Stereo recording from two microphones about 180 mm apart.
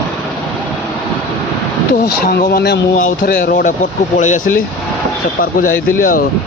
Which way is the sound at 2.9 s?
50° left (ahead or behind).